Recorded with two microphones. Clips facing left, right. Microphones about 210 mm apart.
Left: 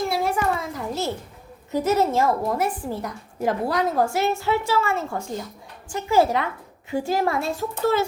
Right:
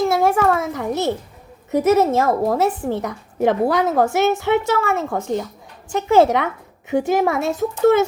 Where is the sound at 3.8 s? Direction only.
20° right (ahead or behind).